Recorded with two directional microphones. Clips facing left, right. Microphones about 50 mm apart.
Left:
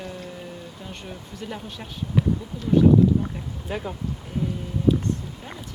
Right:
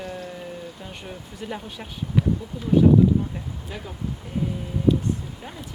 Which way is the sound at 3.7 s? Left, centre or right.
Centre.